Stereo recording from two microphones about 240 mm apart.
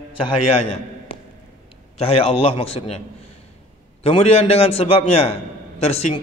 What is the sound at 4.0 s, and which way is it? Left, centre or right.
A man's voice, left.